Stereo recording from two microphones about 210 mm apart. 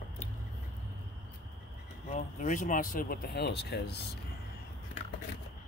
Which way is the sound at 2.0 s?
35° left (ahead or behind).